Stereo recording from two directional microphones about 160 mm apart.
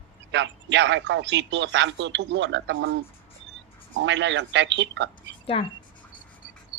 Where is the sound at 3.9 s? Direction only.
90° right.